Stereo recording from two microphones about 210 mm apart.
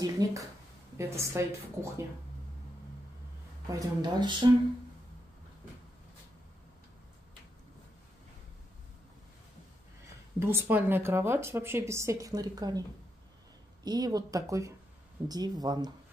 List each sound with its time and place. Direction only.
0.0 s a sound: 15° right (ahead or behind)
0.9 s a woman's voice: 15° right (ahead or behind)
3.7 s speech: 20° right (ahead or behind)
10.4 s a woman's voice: 10° right (ahead or behind)
13.8 s a woman's voice: 20° right (ahead or behind)